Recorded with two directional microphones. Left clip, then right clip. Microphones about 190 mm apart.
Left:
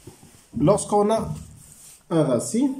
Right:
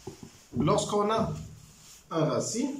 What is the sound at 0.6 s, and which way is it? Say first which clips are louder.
Speech: left 7 dB; 35° left (ahead or behind).